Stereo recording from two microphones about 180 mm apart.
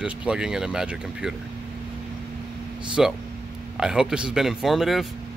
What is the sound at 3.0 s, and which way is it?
Speech, 5° right (ahead or behind).